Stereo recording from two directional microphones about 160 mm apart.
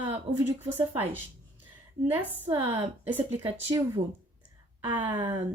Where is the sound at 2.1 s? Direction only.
10° right (ahead or behind).